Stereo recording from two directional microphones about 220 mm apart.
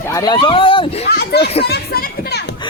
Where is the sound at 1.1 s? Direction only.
45° left (ahead or behind).